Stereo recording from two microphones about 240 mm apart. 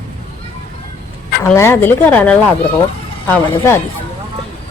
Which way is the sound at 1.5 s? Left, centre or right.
Centre.